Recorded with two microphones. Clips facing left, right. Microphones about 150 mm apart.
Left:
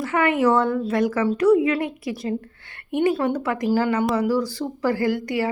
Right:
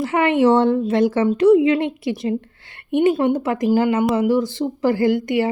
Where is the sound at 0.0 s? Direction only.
25° right (ahead or behind).